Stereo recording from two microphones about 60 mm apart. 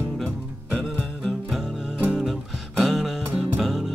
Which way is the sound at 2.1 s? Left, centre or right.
Centre.